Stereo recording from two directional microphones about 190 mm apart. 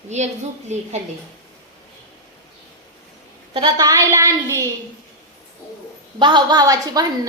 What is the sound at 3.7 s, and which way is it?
Speech, 15° right (ahead or behind).